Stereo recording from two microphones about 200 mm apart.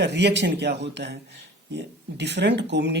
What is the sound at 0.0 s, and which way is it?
Speech, 60° right (ahead or behind).